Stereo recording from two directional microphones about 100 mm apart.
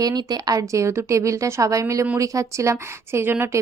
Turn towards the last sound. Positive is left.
turn(degrees=-25)  # may be behind; listen again after turning